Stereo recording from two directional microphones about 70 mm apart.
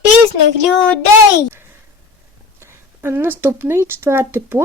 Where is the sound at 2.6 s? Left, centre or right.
Right.